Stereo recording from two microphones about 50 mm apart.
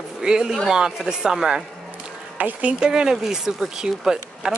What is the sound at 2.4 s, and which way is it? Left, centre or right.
Speech, right.